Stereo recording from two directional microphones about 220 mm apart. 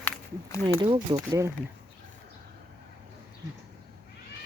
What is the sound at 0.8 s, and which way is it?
Speech, 20° right (ahead or behind).